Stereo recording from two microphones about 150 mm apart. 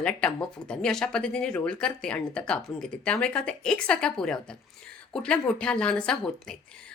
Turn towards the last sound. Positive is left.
turn(degrees=5)  # may be behind; listen again after turning